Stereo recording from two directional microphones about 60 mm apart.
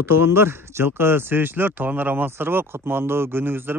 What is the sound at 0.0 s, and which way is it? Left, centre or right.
Speech, right.